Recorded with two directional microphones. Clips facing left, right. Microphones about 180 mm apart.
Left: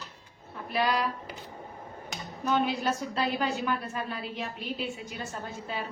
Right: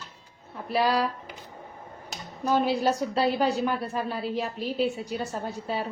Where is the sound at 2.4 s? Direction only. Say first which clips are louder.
Right 4 dB; 35° right (ahead or behind).